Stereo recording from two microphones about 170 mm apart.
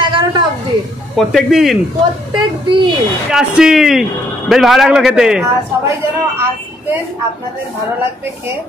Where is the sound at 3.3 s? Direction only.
5° right (ahead or behind).